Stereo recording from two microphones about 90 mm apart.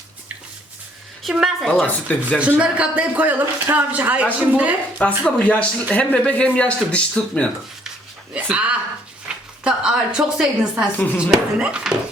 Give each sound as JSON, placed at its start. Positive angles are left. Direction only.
{"t": 1.2, "sound": "a woman's voice", "side_deg": -5}
{"t": 1.6, "sound": "speech", "side_deg": 5}
{"t": 2.6, "sound": "a man's voice", "side_deg": -10}
{"t": 4.9, "sound": "speech", "side_deg": 10}
{"t": 8.3, "sound": "a man's voice", "side_deg": -15}
{"t": 9.3, "sound": "a sound", "side_deg": -10}
{"t": 9.6, "sound": "a man's voice", "side_deg": -10}
{"t": 10.9, "sound": "speech", "side_deg": 20}
{"t": 11.2, "sound": "a man's voice", "side_deg": -10}